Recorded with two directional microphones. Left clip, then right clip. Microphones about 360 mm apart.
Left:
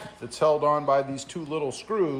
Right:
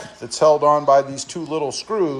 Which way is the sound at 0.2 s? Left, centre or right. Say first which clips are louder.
Right 8 dB; centre.